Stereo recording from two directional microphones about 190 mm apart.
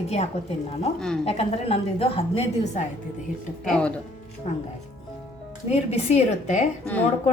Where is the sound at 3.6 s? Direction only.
5° left (ahead or behind).